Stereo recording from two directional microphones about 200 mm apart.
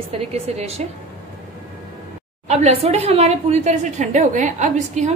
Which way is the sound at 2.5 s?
30° right (ahead or behind).